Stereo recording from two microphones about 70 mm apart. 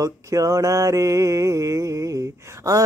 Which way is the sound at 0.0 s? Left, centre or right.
Right.